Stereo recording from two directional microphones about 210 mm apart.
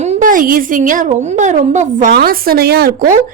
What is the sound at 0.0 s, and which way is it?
A woman's voice, 35° right (ahead or behind).